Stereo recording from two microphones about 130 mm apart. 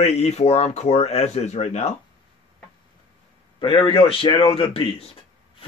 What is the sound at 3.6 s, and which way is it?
Speech, 40° left (ahead or behind).